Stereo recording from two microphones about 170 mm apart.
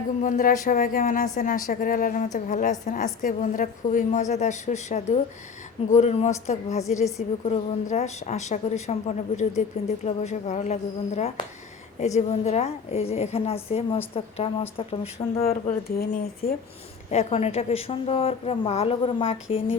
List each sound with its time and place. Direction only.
0.2 s a woman's voice: 50° left (ahead or behind)
15.4 s speech: 60° left (ahead or behind)
17.1 s a woman's voice: 40° left (ahead or behind)